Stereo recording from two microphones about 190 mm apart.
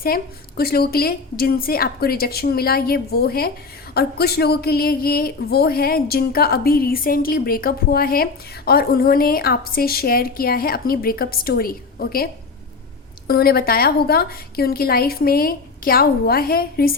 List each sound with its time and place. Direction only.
0.0 s speech: 50° left (ahead or behind)